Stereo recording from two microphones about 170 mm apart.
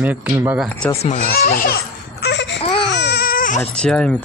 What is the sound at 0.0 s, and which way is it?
Speech, 10° right (ahead or behind).